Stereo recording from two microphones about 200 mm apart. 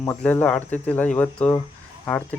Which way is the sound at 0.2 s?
10° left (ahead or behind).